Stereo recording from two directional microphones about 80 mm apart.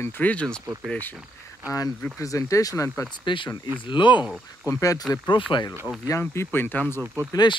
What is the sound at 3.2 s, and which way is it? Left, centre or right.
Speech, left.